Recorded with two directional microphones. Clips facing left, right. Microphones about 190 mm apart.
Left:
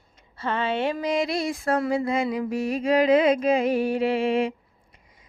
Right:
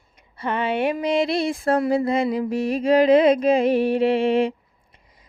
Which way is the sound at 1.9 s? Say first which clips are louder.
Right 4 dB; 35° right (ahead or behind).